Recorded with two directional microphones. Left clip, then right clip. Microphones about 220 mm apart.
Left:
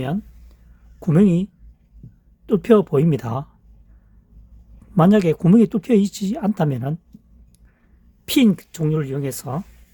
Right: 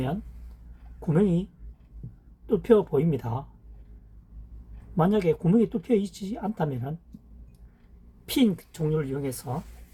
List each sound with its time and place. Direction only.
0.9 s speech: 45° left (ahead or behind)
2.5 s speech: 45° left (ahead or behind)
4.9 s speech: 50° left (ahead or behind)
8.3 s speech: 45° left (ahead or behind)